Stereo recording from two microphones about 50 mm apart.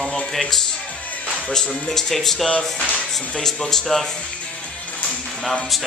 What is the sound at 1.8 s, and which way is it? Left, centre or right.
Speech, centre.